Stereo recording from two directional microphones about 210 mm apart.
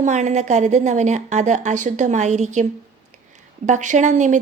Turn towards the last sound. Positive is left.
turn(degrees=-35)  # may be behind; listen again after turning